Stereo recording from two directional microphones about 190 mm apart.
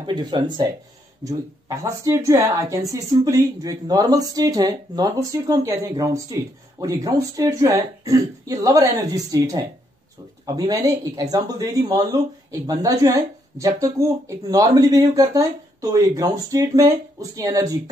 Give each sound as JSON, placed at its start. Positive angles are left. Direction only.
{"t": 0.0, "sound": "speech", "side_deg": -20}